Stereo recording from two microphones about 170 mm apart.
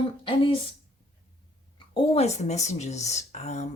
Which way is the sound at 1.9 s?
35° left (ahead or behind).